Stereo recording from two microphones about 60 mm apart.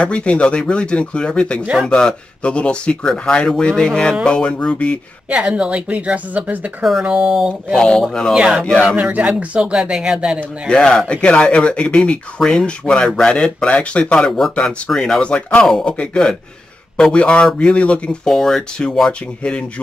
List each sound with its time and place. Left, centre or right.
0.0 s speech: centre
5.3 s speech: centre
6.8 s speech: centre
7.7 s speech: centre
8.4 s speech: centre
10.7 s speech: centre
18.2 s speech: centre
18.9 s speech: centre